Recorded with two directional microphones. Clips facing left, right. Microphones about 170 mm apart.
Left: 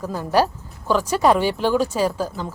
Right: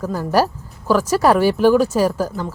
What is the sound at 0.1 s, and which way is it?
Speech, 5° right (ahead or behind).